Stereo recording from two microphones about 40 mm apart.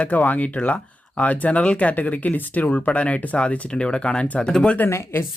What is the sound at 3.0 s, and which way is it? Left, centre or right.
Speech, left.